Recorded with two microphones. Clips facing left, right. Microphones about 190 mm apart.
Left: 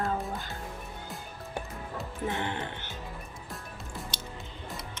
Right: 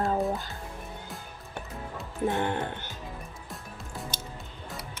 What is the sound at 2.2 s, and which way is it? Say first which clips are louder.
Speech: right 6 dB; 50° right (ahead or behind).